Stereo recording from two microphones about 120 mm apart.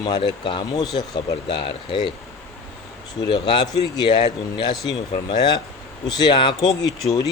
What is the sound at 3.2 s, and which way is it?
Speech, 40° left (ahead or behind).